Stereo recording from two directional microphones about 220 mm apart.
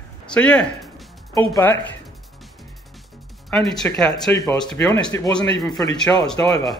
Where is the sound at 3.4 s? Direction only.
Centre (ahead or behind).